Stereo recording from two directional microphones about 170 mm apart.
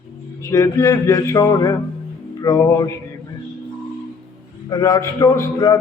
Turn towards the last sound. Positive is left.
turn(degrees=20)  # may be behind; listen again after turning